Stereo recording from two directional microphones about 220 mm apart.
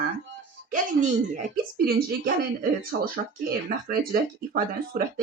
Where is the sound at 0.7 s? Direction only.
35° right (ahead or behind).